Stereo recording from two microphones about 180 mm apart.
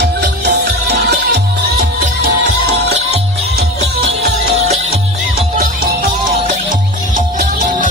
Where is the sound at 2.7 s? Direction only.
40° right (ahead or behind).